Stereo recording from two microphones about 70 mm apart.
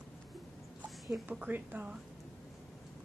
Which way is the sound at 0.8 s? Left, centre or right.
Centre.